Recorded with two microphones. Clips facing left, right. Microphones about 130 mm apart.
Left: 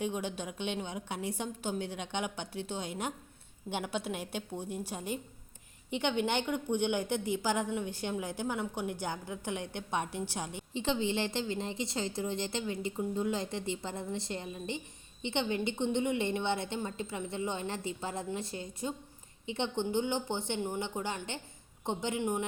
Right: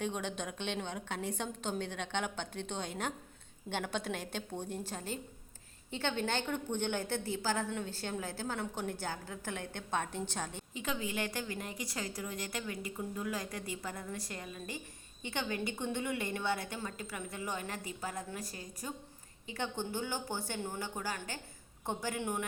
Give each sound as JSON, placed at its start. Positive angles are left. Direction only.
{"t": 0.0, "sound": "a woman's voice", "side_deg": 10}
{"t": 10.8, "sound": "a woman's voice", "side_deg": 30}